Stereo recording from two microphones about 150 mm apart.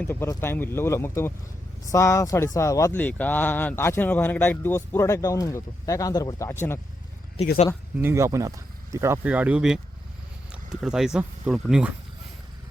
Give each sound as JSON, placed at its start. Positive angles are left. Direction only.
{"t": 0.0, "sound": "speech", "side_deg": 15}
{"t": 7.9, "sound": "speech", "side_deg": -15}